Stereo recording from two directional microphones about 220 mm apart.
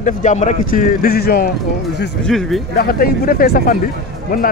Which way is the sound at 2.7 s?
45° left (ahead or behind).